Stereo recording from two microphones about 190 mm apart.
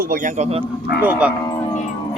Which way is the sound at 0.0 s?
45° right (ahead or behind).